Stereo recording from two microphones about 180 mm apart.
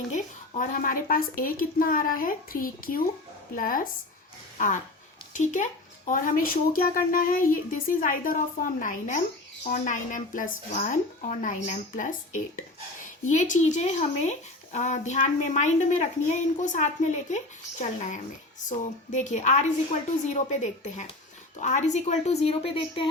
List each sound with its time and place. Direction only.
0.1 s speech: 45° left (ahead or behind)
4.5 s a sound: 45° left (ahead or behind)
5.3 s a woman's voice: 45° left (ahead or behind)